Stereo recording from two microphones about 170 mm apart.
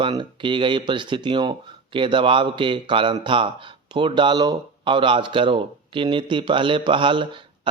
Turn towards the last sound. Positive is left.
turn(degrees=-30)  # may be behind; listen again after turning